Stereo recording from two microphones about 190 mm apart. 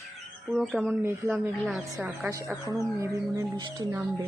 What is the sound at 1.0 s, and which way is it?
Speech, 15° right (ahead or behind).